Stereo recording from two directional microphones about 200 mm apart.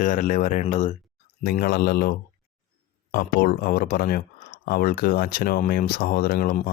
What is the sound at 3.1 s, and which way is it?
Speech, 45° left (ahead or behind).